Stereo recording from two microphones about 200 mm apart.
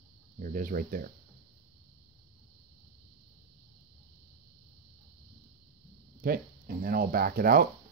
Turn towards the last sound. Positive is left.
turn(degrees=-50)  # may be behind; listen again after turning